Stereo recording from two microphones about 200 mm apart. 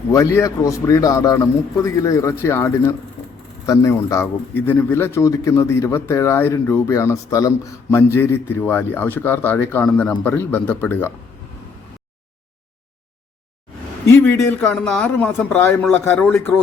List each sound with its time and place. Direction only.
0.1 s a man's voice: 15° left (ahead or behind)
14.1 s a man's voice: 10° left (ahead or behind)